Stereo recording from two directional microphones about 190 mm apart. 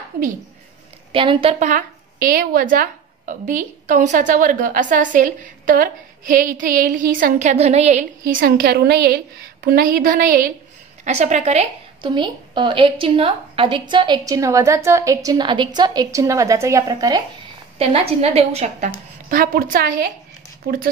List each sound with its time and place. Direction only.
1.1 s a woman's voice: 25° right (ahead or behind)
8.3 s a woman's voice: 50° right (ahead or behind)
11.1 s a woman's voice: 40° right (ahead or behind)
12.0 s a woman's voice: 25° right (ahead or behind)
17.7 s a woman's voice: 30° right (ahead or behind)
19.2 s a woman's voice: 50° right (ahead or behind)